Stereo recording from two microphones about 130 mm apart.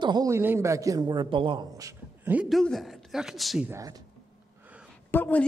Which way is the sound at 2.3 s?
5° right (ahead or behind).